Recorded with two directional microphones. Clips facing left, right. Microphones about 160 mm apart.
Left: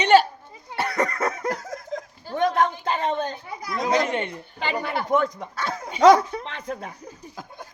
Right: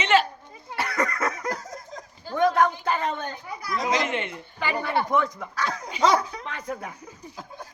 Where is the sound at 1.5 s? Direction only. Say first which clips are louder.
Left 4 dB; 65° left (ahead or behind).